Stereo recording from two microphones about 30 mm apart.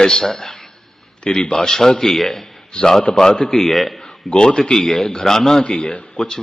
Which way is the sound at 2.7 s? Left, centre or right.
Left.